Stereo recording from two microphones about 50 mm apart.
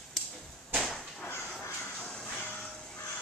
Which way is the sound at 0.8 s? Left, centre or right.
Centre.